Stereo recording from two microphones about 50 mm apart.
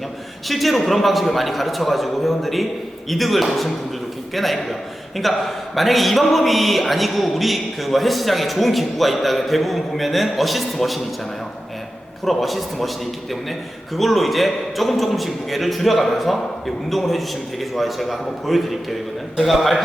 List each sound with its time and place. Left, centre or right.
0.4 s a man's voice: centre
12.2 s a man's voice: centre
13.9 s a man's voice: centre